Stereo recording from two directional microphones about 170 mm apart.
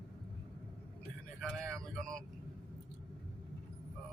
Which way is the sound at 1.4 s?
5° left (ahead or behind).